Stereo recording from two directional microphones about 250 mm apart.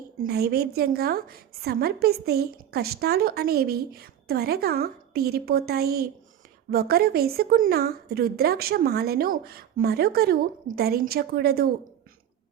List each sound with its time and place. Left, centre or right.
0.2 s a woman's voice: right